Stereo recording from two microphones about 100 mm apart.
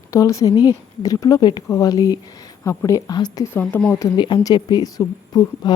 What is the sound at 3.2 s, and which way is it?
Speech, 45° left (ahead or behind).